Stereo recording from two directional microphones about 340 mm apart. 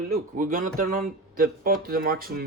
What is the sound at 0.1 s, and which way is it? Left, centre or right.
Speech, right.